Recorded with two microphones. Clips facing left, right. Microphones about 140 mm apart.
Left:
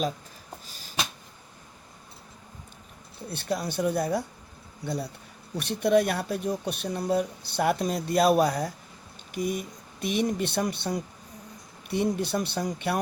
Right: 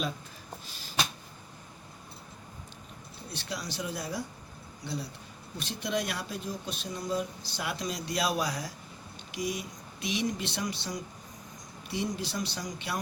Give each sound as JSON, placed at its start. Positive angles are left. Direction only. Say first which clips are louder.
{"t": 3.2, "sound": "speech", "louder": "left 8 dB", "side_deg": 55}